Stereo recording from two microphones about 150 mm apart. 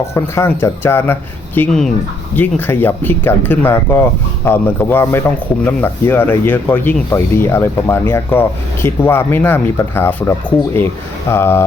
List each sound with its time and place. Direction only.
0.1 s speech: 15° left (ahead or behind)